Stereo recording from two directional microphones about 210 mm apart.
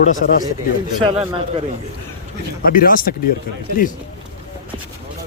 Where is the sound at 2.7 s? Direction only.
40° left (ahead or behind).